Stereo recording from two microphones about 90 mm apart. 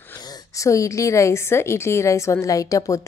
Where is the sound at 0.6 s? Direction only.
35° left (ahead or behind).